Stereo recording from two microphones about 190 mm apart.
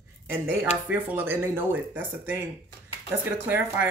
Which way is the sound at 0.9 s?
10° right (ahead or behind).